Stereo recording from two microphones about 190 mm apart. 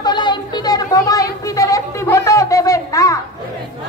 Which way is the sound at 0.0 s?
25° left (ahead or behind).